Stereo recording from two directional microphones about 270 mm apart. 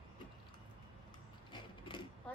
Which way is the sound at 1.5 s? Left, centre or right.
Centre.